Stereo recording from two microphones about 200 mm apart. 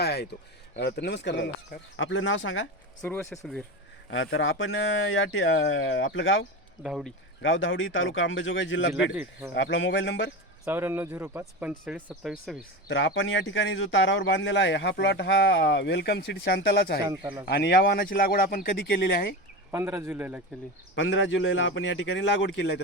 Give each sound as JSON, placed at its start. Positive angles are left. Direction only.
{"t": 0.0, "sound": "a sound", "side_deg": 55}
{"t": 0.8, "sound": "a man's voice", "side_deg": 55}
{"t": 2.0, "sound": "speech", "side_deg": 70}
{"t": 3.3, "sound": "speech", "side_deg": 5}
{"t": 4.1, "sound": "speech", "side_deg": 70}
{"t": 6.8, "sound": "speech", "side_deg": 0}
{"t": 7.4, "sound": "a man's voice", "side_deg": 75}
{"t": 10.7, "sound": "speech", "side_deg": -10}
{"t": 12.9, "sound": "a man's voice", "side_deg": 70}
{"t": 17.0, "sound": "a man's voice", "side_deg": -20}
{"t": 17.4, "sound": "speech", "side_deg": 50}
{"t": 19.7, "sound": "speech", "side_deg": -10}
{"t": 20.9, "sound": "speech", "side_deg": 70}